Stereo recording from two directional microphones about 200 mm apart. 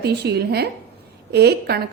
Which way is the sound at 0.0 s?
55° right (ahead or behind).